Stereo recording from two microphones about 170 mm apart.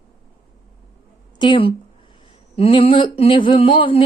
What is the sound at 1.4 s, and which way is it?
Speech, 30° left (ahead or behind).